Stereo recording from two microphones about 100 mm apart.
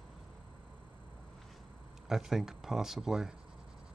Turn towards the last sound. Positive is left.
turn(degrees=-5)  # may be behind; listen again after turning